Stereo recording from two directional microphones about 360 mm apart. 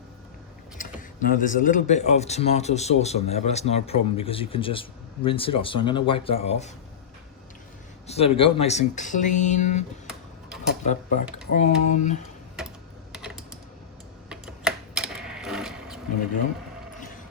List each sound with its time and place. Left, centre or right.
0.8 s speech: left
8.0 s speech: centre
10.6 s a sound: centre
11.5 s speech: centre
12.6 s typing: centre